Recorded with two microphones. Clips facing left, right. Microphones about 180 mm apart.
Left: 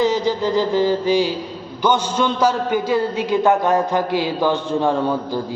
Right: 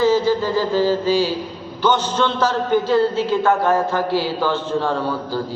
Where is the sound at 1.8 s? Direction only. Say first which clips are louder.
Even; 10° left (ahead or behind).